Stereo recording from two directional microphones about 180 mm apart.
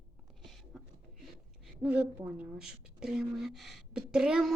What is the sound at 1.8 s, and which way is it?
Speech, 10° right (ahead or behind).